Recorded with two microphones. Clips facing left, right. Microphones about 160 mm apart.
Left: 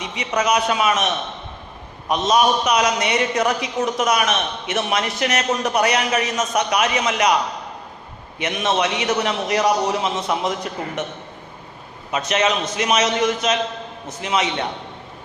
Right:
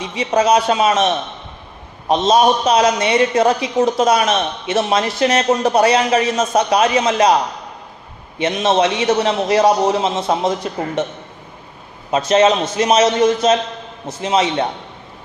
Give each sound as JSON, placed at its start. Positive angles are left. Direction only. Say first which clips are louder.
{"t": 0.0, "sound": "a man's voice", "louder": "right 6 dB", "side_deg": -30}
{"t": 8.4, "sound": "a man's voice", "louder": "right 6 dB", "side_deg": -30}
{"t": 12.1, "sound": "a man's voice", "louder": "right 7 dB", "side_deg": -30}